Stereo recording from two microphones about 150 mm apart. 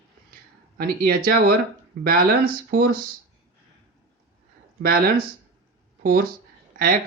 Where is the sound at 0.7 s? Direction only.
90° right.